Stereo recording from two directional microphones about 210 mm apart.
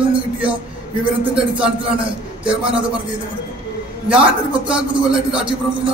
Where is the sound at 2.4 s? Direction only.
5° right (ahead or behind).